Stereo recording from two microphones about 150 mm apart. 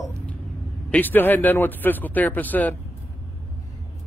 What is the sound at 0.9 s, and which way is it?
Speech, 10° left (ahead or behind).